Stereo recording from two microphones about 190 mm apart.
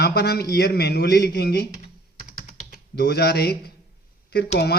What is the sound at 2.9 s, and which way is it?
Speech, 60° left (ahead or behind).